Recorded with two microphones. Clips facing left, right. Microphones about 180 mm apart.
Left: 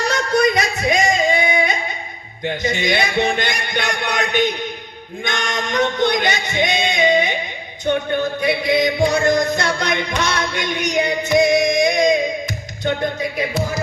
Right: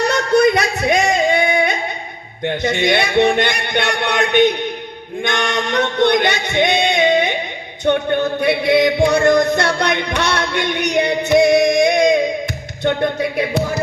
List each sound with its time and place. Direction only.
0.1 s music: 65° right (ahead or behind)
2.4 s speech: 60° right (ahead or behind)
5.2 s music: 60° right (ahead or behind)
7.9 s speech: 60° right (ahead or behind)
9.0 s music: 60° right (ahead or behind)